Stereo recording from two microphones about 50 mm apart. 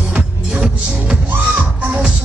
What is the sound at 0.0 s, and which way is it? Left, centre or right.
Music, right.